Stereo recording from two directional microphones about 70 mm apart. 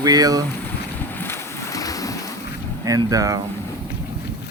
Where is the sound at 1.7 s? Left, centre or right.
Left.